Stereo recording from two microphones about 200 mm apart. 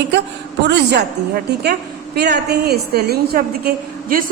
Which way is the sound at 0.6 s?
60° right (ahead or behind).